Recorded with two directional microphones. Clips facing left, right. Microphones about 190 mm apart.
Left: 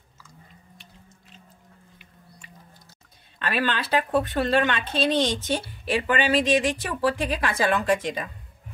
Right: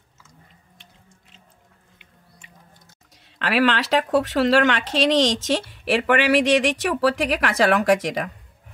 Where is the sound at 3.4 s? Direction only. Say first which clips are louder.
Right 6 dB; 90° right.